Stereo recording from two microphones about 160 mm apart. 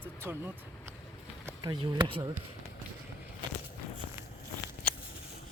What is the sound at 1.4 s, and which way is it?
Speech, 25° right (ahead or behind).